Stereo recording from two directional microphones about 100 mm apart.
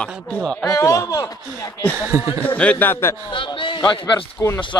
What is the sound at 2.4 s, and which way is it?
Speech, 15° left (ahead or behind).